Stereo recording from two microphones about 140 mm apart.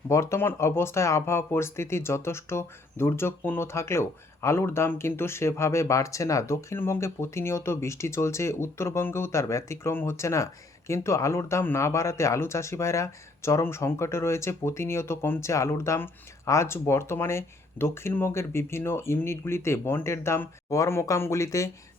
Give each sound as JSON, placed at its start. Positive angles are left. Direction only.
{"t": 0.1, "sound": "speech", "side_deg": 20}